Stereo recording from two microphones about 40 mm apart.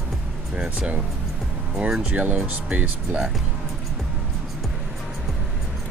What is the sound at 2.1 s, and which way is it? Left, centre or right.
Speech, right.